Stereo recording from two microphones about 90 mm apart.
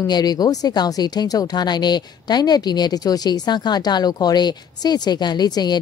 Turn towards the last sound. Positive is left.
turn(degrees=50)  # may be behind; listen again after turning